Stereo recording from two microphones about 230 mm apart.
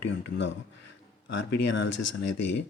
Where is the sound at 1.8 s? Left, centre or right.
Left.